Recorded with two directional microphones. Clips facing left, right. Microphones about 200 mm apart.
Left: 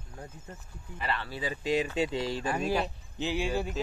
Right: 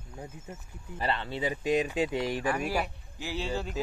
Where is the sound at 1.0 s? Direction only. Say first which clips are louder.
Right 3 dB; 25° right (ahead or behind).